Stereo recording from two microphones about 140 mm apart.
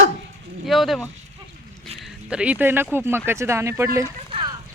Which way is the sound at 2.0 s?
5° right (ahead or behind).